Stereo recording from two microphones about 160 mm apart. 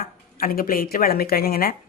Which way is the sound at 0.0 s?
65° left (ahead or behind).